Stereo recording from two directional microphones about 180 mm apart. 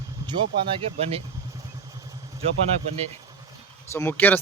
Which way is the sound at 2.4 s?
35° right (ahead or behind).